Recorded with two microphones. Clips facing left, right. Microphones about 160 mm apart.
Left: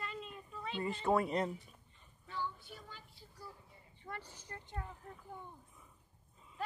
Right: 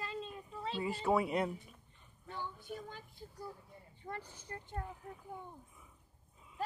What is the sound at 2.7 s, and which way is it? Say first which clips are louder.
Speech: right 8 dB; 50° right (ahead or behind).